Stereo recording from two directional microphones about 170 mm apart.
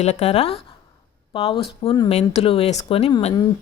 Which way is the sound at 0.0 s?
35° left (ahead or behind).